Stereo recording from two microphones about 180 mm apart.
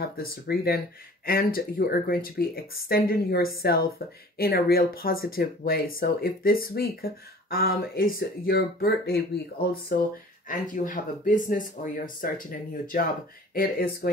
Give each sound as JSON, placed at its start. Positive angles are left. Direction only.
{"t": 0.0, "sound": "speech", "side_deg": 60}
{"t": 10.5, "sound": "speech", "side_deg": 45}